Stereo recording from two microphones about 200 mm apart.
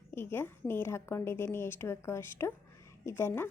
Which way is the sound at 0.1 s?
10° left (ahead or behind).